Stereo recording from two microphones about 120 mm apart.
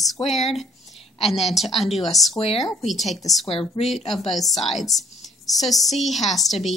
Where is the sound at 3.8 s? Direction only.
50° left (ahead or behind).